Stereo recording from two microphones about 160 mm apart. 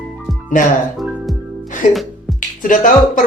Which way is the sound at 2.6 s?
55° left (ahead or behind).